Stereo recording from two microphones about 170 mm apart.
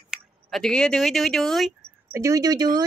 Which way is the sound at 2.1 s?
20° right (ahead or behind).